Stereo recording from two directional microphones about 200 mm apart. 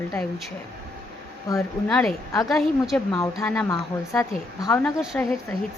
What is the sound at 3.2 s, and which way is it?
A woman's voice, 10° left (ahead or behind).